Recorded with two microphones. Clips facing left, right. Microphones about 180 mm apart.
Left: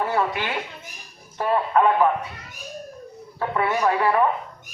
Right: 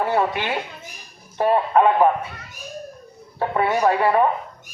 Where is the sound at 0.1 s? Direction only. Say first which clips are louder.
Right 3 dB; 20° right (ahead or behind).